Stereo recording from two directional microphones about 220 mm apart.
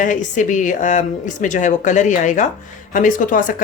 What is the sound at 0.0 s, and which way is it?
Speech, 35° left (ahead or behind).